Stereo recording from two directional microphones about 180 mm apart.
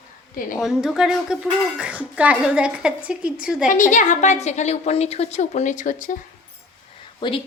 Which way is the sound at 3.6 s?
45° left (ahead or behind).